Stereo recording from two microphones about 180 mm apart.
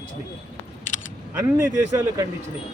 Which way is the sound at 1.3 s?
15° right (ahead or behind).